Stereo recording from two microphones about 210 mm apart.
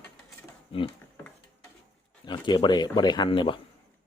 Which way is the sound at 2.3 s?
20° left (ahead or behind).